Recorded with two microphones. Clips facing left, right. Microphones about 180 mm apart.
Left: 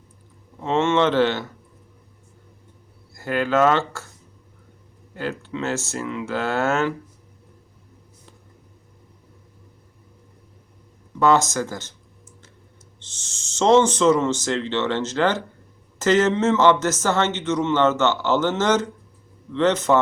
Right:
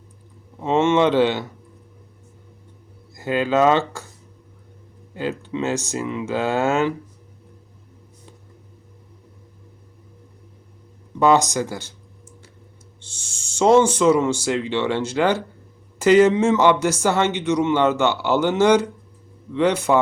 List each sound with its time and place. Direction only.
0.6 s speech: 15° right (ahead or behind)
3.2 s speech: 15° right (ahead or behind)
5.4 s speech: 15° right (ahead or behind)
11.2 s speech: 15° right (ahead or behind)
13.0 s speech: 10° right (ahead or behind)